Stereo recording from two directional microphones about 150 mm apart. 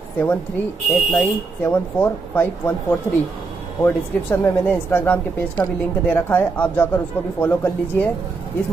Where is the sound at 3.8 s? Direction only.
15° left (ahead or behind).